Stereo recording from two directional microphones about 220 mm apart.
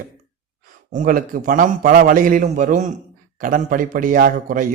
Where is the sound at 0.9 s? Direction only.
40° right (ahead or behind).